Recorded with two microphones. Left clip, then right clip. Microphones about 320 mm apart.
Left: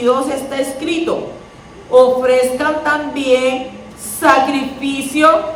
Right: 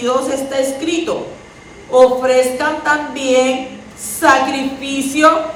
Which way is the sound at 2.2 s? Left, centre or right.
Centre.